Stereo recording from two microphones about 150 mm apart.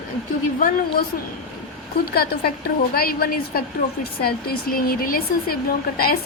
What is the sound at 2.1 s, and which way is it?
A woman's voice, 90° left.